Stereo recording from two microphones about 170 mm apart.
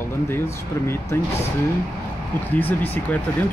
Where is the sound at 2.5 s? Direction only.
10° left (ahead or behind).